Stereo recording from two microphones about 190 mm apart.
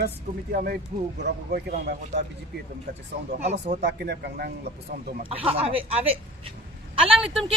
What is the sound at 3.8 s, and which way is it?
Speech, 55° right (ahead or behind).